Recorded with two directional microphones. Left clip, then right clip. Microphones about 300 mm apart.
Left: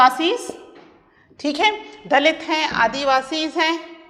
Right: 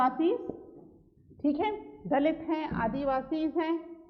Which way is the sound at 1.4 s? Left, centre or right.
Centre.